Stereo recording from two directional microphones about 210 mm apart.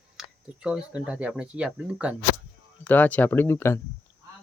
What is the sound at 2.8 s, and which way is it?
Speech, 10° left (ahead or behind).